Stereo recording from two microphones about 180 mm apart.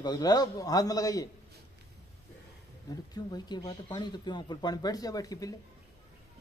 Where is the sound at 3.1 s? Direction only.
20° left (ahead or behind).